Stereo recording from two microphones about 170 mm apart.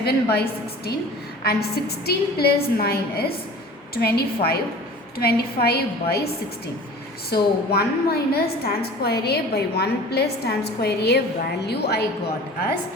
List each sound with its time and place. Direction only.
0.0 s a woman's voice: 70° left (ahead or behind)
1.5 s a woman's voice: 65° left (ahead or behind)
7.7 s a woman's voice: 65° left (ahead or behind)